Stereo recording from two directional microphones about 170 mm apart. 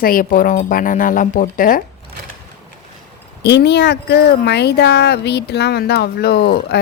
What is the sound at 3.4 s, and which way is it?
Speech, 80° left.